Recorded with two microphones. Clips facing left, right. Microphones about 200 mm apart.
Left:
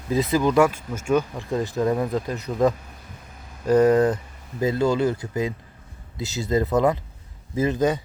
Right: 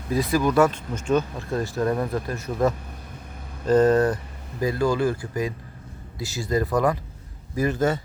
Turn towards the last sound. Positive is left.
turn(degrees=15)  # may be behind; listen again after turning